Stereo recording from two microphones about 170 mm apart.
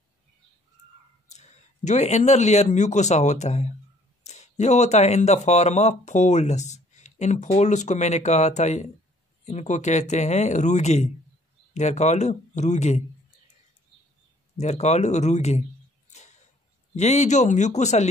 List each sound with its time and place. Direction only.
1.3 s speech: 40° left (ahead or behind)
14.6 s speech: 40° left (ahead or behind)
16.9 s speech: 40° left (ahead or behind)